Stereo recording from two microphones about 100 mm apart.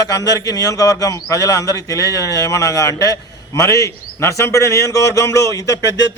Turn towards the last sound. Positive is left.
turn(degrees=35)  # may be behind; listen again after turning